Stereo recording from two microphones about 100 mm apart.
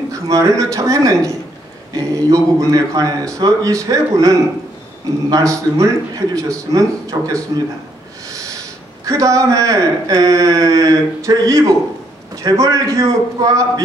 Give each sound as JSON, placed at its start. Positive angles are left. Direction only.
{"t": 0.3, "sound": "speech", "side_deg": -35}
{"t": 9.0, "sound": "speech", "side_deg": -35}